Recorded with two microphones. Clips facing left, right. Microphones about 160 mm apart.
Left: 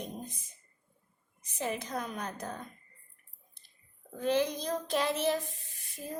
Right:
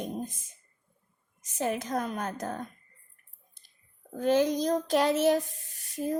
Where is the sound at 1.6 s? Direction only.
45° right (ahead or behind).